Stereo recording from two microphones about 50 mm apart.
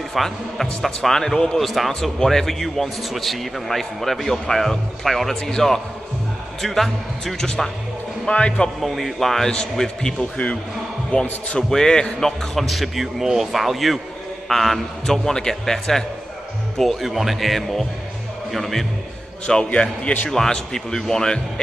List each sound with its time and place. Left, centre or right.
0.1 s a man's voice: centre
7.4 s a man's voice: centre
8.8 s a man's voice: centre
10.3 s a man's voice: left
11.7 s a man's voice: centre
19.4 s a man's voice: centre